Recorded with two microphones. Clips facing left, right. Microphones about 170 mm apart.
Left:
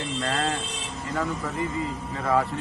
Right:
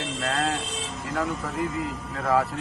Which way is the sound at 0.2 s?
Centre (ahead or behind).